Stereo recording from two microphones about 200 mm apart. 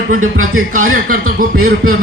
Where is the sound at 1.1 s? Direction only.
45° right (ahead or behind).